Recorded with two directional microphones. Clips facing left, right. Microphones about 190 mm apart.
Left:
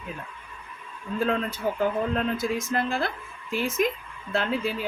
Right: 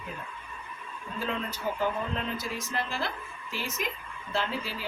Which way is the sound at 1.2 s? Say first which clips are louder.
Left 6 dB; 50° left (ahead or behind).